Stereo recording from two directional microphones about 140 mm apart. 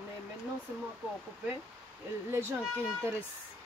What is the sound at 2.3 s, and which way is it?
Speech, 15° right (ahead or behind).